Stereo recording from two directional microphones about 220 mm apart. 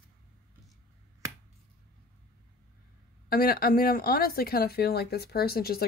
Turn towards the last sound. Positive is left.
turn(degrees=45)  # may be behind; listen again after turning